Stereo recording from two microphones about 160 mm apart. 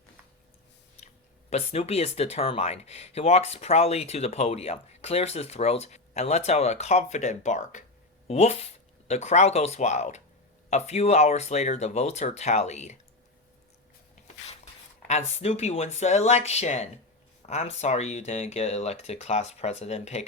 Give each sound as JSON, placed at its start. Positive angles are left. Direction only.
{"t": 1.0, "sound": "speech", "side_deg": 40}
{"t": 8.3, "sound": "speech", "side_deg": 40}
{"t": 14.4, "sound": "speech", "side_deg": 45}